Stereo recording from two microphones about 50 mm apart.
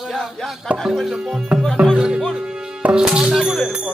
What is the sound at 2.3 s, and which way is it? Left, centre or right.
Music, centre.